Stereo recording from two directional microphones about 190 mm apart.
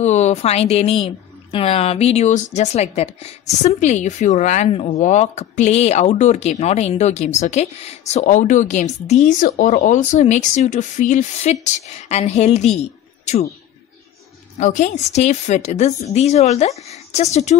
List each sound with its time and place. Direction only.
0.0 s speech: 35° left (ahead or behind)
12.7 s a sound: 35° left (ahead or behind)
14.6 s speech: 40° left (ahead or behind)